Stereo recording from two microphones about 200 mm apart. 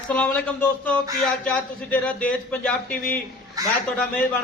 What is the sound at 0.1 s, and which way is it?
Speech, 5° left (ahead or behind).